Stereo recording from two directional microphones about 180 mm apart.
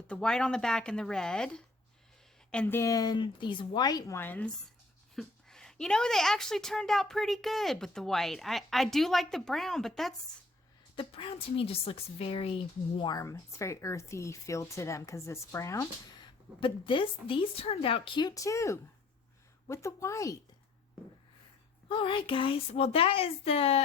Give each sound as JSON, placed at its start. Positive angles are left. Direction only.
{"t": 0.1, "sound": "a woman's voice", "side_deg": 5}
{"t": 10.9, "sound": "speech", "side_deg": 30}
{"t": 13.0, "sound": "speech", "side_deg": 20}
{"t": 21.8, "sound": "speech", "side_deg": 30}